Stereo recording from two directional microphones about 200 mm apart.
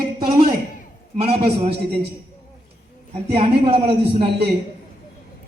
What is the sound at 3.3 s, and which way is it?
Speech, 25° right (ahead or behind).